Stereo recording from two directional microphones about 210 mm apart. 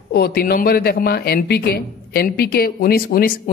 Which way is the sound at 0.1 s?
50° left (ahead or behind).